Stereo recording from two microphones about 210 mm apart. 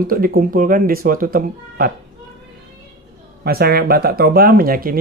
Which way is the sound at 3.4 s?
45° right (ahead or behind).